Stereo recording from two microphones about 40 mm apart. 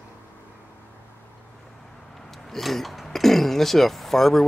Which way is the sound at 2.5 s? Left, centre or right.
Centre.